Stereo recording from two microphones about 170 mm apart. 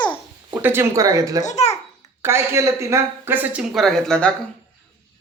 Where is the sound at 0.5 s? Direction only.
15° right (ahead or behind).